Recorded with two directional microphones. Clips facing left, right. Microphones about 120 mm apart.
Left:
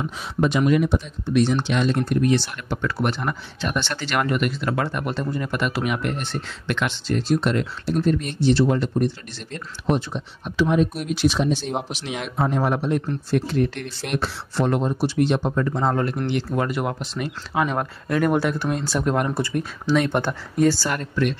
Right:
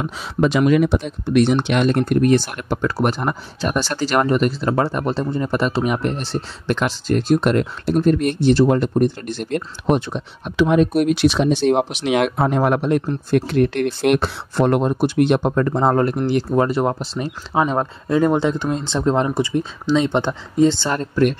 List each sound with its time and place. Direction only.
0.0 s speech: 90° right; by 7.2 s 40° right (ahead or behind)
7.2 s speech: 50° right (ahead or behind); by 21.2 s 30° right (ahead or behind)